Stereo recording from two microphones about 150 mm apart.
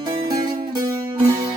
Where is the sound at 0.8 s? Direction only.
25° right (ahead or behind).